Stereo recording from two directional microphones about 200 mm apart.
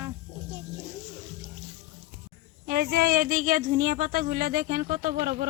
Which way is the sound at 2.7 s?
50° right (ahead or behind).